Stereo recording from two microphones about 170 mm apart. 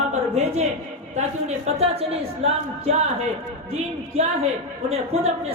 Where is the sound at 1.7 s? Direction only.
35° right (ahead or behind).